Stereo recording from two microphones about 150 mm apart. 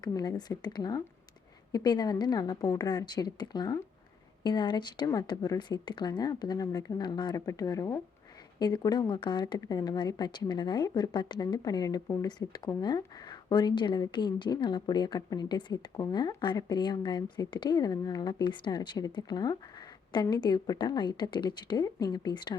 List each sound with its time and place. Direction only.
0.0 s speech: 25° left (ahead or behind)